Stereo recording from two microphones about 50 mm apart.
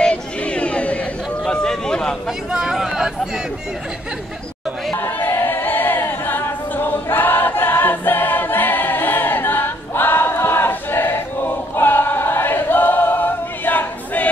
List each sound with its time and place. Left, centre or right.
0.0 s a sound: left
2.5 s speech: centre
5.2 s choir: left